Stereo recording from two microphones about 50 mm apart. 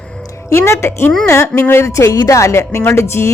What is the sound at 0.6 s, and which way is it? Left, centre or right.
Speech, left.